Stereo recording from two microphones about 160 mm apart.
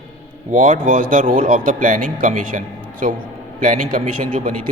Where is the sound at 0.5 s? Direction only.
55° right (ahead or behind).